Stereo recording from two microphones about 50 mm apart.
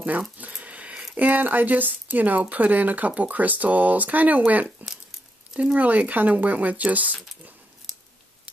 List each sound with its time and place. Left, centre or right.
0.4 s a sound: right
1.1 s speech: right
4.8 s crumpling: centre
5.6 s speech: right
7.9 s scissors: centre